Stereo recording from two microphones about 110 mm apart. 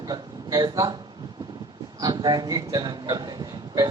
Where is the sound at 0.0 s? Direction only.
40° right (ahead or behind).